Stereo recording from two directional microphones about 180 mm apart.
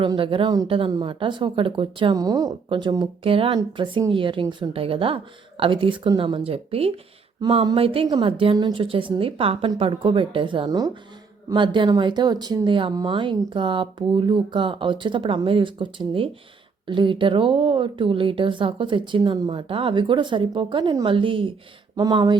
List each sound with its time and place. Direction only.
0.0 s speech: 30° right (ahead or behind)